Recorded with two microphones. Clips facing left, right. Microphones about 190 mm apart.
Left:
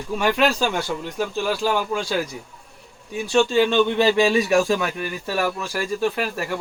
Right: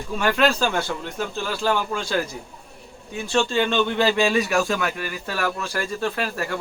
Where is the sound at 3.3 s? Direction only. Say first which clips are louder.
Left 4 dB; 10° left (ahead or behind); by 4.9 s 25° left (ahead or behind).